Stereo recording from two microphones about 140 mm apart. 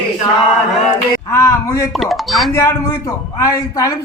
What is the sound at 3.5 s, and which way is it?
Speech, 25° left (ahead or behind).